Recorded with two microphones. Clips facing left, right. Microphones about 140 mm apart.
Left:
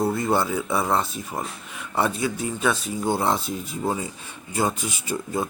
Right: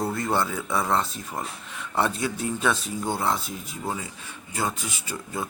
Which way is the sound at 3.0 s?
15° left (ahead or behind).